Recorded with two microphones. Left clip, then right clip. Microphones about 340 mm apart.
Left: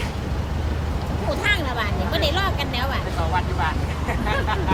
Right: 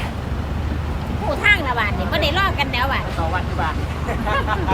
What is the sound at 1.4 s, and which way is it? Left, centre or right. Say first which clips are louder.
Vehicle: right 7 dB; centre.